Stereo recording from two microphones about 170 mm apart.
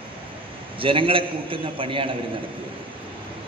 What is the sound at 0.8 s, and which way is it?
A man's voice, 30° right (ahead or behind).